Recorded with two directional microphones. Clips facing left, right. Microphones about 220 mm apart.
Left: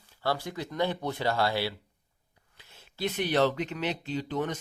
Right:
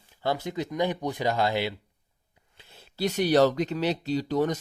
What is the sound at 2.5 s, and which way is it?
Speech, 30° right (ahead or behind).